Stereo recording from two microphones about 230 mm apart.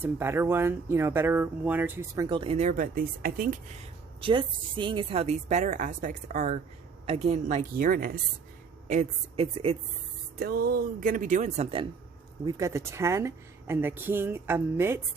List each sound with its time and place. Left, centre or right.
0.0 s speech: centre; by 3.8 s right
4.2 s a woman's voice: right
8.9 s a woman's voice: right
10.3 s a woman's voice: right
12.5 s speech: centre